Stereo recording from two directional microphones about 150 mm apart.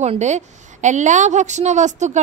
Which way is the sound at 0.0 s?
50° right (ahead or behind).